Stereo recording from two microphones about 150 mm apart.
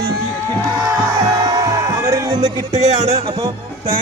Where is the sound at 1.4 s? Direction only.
20° right (ahead or behind).